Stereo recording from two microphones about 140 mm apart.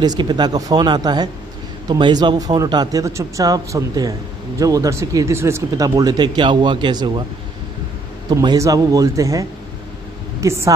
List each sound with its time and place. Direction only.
0.0 s speech: 30° right (ahead or behind)
8.3 s speech: 30° right (ahead or behind)